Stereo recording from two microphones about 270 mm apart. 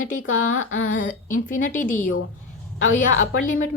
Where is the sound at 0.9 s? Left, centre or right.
Left.